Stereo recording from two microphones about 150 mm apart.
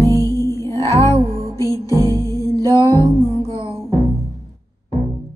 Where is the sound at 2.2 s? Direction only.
25° left (ahead or behind).